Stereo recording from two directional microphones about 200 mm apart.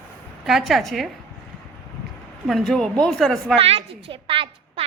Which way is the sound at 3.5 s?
30° right (ahead or behind).